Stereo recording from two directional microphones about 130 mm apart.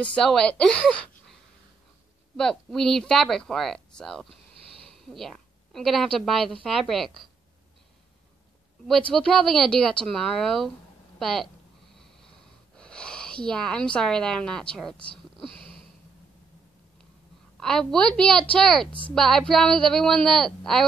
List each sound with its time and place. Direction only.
0.0 s speech: 5° left (ahead or behind)
2.3 s a woman's voice: 5° left (ahead or behind)
9.1 s speech: centre (ahead or behind)
12.7 s speech: 5° left (ahead or behind)
15.4 s sniff: 40° right (ahead or behind)
17.6 s speech: 5° left (ahead or behind)